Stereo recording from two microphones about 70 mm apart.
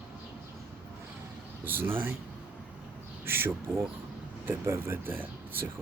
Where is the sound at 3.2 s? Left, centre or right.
Right.